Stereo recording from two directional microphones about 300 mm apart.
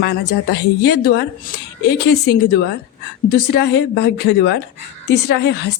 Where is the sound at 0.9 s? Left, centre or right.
Left.